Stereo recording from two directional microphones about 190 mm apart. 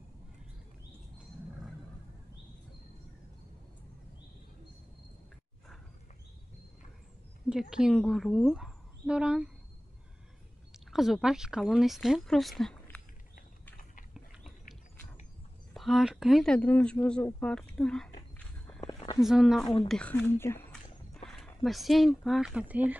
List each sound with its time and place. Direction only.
7.7 s speech: centre (ahead or behind)
10.9 s speech: centre (ahead or behind)
15.7 s speech: centre (ahead or behind)
18.9 s a sound: 20° left (ahead or behind)
19.2 s speech: centre (ahead or behind)